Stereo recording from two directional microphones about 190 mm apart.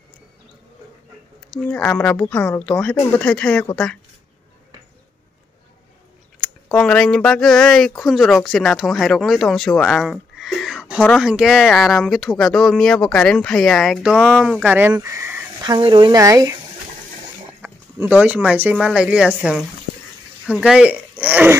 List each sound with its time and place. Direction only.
1.5 s speech: 5° left (ahead or behind)
6.4 s speech: 5° left (ahead or behind)
15.6 s speech: 25° right (ahead or behind)
17.6 s speech: 10° right (ahead or behind)